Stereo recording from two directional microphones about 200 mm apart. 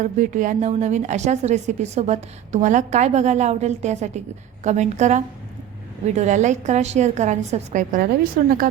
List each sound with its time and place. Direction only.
0.0 s a woman's voice: 40° right (ahead or behind)